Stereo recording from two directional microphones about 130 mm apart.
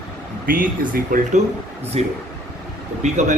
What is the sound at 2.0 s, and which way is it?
Speech, 55° right (ahead or behind).